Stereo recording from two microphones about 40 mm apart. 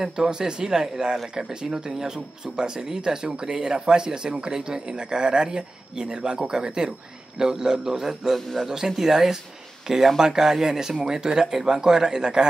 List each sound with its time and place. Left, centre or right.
0.0 s speech: centre